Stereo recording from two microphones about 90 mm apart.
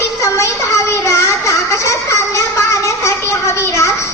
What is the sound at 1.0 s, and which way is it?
Music, 35° left (ahead or behind).